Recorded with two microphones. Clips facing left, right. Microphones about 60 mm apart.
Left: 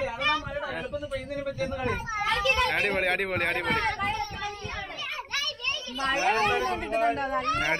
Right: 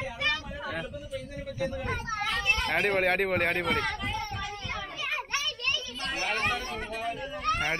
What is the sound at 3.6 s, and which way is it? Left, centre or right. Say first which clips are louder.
Speech: left 3 dB; left.